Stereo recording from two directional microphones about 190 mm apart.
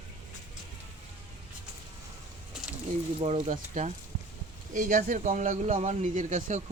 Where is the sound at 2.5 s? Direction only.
5° right (ahead or behind).